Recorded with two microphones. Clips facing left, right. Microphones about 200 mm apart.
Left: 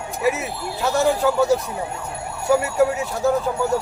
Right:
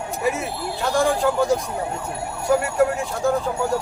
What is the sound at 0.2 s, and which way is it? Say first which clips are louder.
Speech: left 3 dB; 5° left (ahead or behind).